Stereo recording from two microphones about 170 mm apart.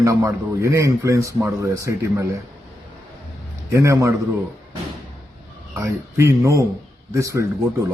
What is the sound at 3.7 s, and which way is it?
Speech, 20° right (ahead or behind).